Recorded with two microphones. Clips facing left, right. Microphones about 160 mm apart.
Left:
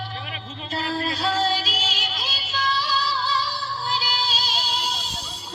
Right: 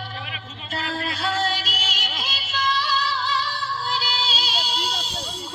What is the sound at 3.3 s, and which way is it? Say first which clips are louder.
Music: even; 35° left (ahead or behind).